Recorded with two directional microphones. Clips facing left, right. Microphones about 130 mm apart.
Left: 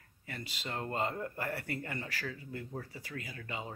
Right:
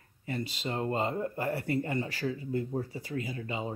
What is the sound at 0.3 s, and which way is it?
Speech, 25° right (ahead or behind).